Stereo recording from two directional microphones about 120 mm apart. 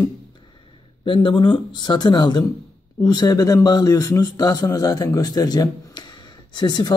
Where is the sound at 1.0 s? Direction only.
45° left (ahead or behind).